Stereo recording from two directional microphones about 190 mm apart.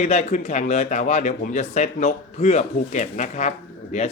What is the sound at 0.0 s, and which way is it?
Speech, 35° left (ahead or behind).